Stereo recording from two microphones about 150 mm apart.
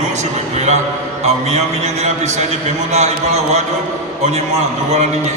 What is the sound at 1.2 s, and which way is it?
A man's voice, 50° right (ahead or behind).